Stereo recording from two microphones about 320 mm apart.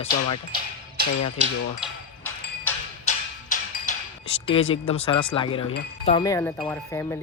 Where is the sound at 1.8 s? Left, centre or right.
Centre.